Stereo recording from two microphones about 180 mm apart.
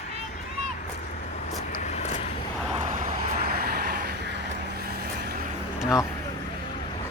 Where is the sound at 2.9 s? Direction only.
50° right (ahead or behind).